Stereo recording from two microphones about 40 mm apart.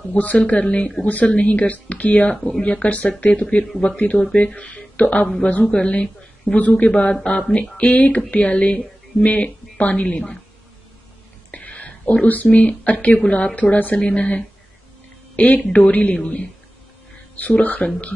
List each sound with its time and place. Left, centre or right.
0.1 s speech: left
4.7 s a sound: left
5.4 s a woman's voice: left
11.5 s speech: left
13.6 s speech: left
13.9 s speech: left
17.4 s speech: left